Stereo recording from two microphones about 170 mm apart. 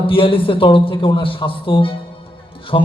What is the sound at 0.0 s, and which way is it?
A man's voice, 30° left (ahead or behind).